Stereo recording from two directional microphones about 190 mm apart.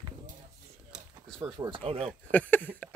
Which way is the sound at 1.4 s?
20° right (ahead or behind).